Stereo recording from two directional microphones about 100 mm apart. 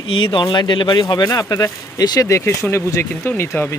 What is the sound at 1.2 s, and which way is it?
Speech, 35° left (ahead or behind).